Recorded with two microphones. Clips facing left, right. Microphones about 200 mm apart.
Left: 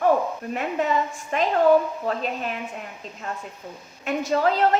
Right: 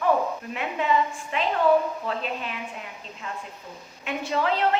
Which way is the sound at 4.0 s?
40° left (ahead or behind).